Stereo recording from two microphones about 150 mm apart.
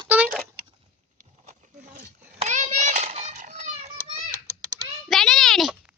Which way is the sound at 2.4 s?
50° right (ahead or behind).